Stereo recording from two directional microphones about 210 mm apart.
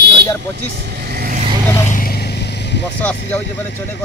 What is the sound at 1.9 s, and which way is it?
Vehicle, 45° left (ahead or behind).